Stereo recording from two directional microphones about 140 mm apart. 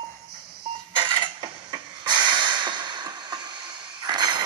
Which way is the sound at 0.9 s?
35° right (ahead or behind).